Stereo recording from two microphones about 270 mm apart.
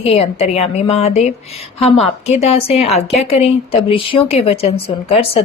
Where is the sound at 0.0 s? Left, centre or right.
Left.